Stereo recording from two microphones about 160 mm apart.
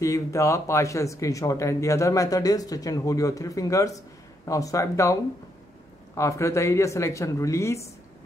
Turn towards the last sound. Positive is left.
turn(degrees=20)  # may be behind; listen again after turning